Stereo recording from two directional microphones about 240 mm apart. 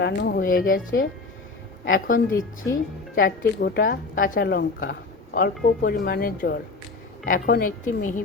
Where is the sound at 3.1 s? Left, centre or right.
Left.